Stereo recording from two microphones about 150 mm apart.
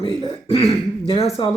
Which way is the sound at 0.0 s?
35° left (ahead or behind).